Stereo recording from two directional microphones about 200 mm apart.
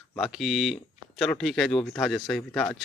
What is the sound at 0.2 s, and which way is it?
A man's voice, centre (ahead or behind).